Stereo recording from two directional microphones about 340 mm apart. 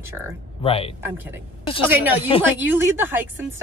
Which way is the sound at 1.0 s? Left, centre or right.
Centre.